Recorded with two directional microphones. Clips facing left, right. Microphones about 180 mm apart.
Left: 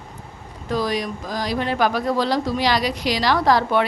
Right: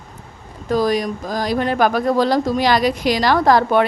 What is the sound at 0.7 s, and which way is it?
Speech, 45° right (ahead or behind).